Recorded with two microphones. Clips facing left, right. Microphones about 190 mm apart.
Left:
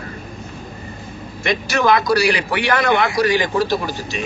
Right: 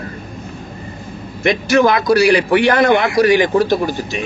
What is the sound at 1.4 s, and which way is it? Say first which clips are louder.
A man's voice: right 6 dB; 50° right (ahead or behind).